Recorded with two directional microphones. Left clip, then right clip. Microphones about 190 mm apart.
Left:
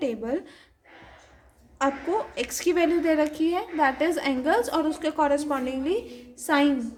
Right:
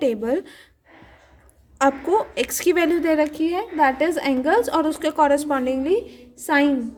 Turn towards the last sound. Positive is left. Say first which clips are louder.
# right 4 dB
turn(degrees=-30)  # may be behind; listen again after turning